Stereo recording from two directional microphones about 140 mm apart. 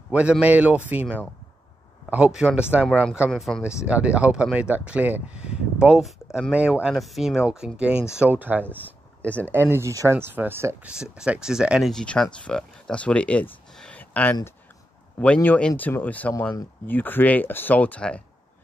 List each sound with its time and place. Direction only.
0.1 s speech: 10° right (ahead or behind)
2.0 s speech: 5° right (ahead or behind)
10.9 s speech: 5° right (ahead or behind)
11.9 s speech: 5° left (ahead or behind)